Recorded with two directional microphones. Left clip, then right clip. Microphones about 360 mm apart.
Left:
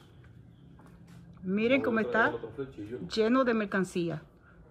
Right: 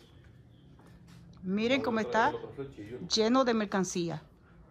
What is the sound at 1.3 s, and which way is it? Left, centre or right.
Speech, centre.